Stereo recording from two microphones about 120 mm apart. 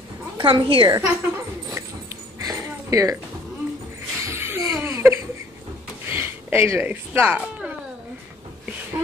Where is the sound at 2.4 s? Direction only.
25° right (ahead or behind).